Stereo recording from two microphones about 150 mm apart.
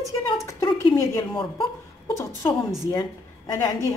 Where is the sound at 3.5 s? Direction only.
25° left (ahead or behind).